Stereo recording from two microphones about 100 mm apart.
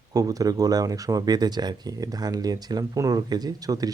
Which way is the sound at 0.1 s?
35° right (ahead or behind).